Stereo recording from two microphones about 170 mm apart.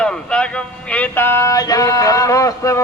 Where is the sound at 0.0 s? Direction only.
5° left (ahead or behind).